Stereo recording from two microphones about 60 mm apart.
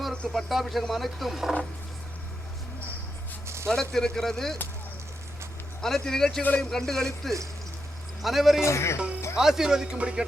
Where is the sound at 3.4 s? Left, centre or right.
Right.